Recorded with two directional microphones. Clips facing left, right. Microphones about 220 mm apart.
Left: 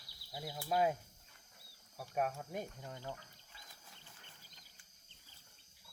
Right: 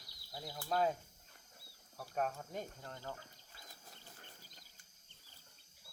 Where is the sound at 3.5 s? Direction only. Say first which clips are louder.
Right 3 dB; 40° right (ahead or behind).